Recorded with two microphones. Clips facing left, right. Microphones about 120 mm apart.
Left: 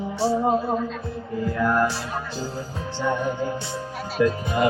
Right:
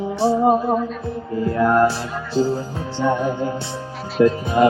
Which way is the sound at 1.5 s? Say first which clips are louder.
Right 6 dB; 30° right (ahead or behind).